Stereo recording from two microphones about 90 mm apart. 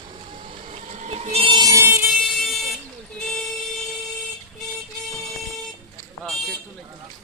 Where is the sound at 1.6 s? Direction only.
35° right (ahead or behind).